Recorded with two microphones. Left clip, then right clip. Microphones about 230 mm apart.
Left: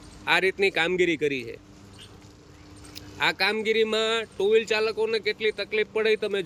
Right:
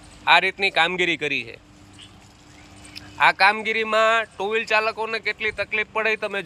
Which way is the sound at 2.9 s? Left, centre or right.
Centre.